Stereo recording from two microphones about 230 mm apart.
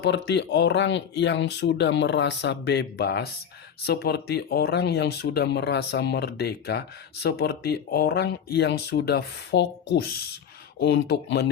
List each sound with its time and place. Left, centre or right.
0.0 s speech: left